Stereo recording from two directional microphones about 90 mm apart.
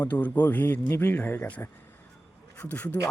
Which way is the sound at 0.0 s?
20° left (ahead or behind).